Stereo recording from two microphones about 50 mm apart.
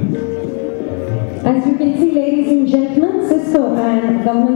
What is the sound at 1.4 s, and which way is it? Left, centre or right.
Speech, centre.